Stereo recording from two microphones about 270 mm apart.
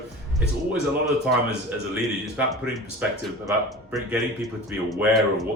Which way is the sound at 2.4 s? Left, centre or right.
Centre.